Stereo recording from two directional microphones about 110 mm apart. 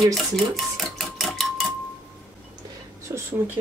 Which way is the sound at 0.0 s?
Centre (ahead or behind).